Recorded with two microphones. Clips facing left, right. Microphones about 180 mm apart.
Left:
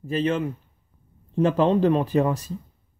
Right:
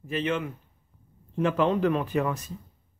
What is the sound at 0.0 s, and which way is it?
A man's voice, 35° left (ahead or behind).